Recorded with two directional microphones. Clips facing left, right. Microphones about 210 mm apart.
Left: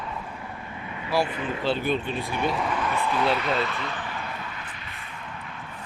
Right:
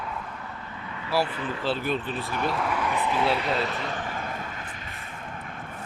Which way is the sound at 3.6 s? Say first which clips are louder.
Even; 40° right (ahead or behind).